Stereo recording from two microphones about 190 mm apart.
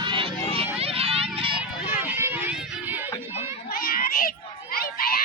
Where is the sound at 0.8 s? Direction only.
30° right (ahead or behind).